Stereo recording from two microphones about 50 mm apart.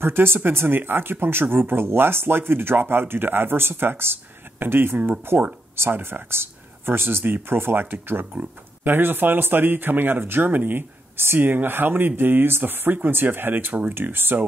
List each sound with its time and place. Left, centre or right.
0.0 s speech: right